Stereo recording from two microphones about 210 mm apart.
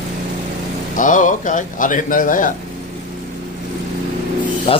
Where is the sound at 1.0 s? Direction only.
40° left (ahead or behind).